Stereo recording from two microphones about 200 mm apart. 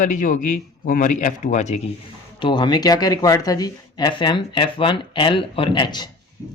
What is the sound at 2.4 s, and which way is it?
Speech, 20° left (ahead or behind).